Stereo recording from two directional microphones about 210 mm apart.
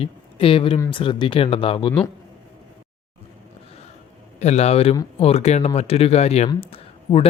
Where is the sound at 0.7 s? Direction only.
15° left (ahead or behind).